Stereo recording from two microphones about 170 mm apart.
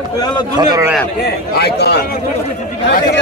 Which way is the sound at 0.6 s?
25° right (ahead or behind).